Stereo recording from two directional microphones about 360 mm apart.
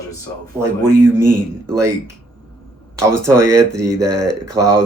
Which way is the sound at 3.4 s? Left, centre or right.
Right.